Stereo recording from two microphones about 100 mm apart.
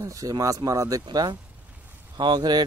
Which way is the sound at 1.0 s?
50° right (ahead or behind).